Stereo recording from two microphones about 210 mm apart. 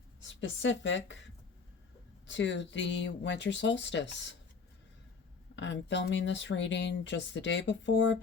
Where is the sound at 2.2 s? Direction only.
60° left (ahead or behind).